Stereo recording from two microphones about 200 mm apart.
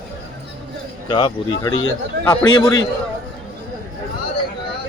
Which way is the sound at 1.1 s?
20° left (ahead or behind).